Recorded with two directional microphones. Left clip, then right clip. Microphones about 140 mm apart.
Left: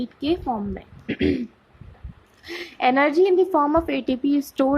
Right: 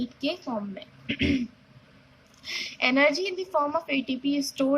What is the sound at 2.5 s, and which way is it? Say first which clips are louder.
A woman's voice: left 5 dB; 45° left (ahead or behind).